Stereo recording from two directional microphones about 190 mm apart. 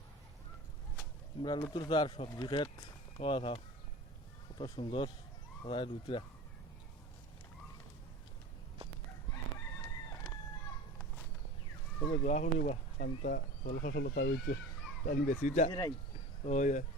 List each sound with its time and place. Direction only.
1.4 s speech: 20° left (ahead or behind)
12.0 s speech: 40° left (ahead or behind)
15.0 s speech: 45° left (ahead or behind)